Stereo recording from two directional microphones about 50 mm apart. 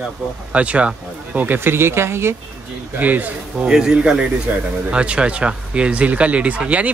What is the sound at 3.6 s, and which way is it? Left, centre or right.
Speech, centre.